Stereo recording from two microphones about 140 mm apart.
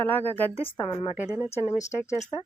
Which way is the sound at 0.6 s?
40° left (ahead or behind).